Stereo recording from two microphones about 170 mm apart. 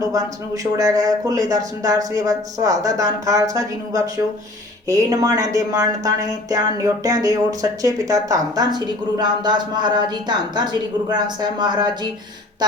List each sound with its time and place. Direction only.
0.0 s speech: 20° right (ahead or behind)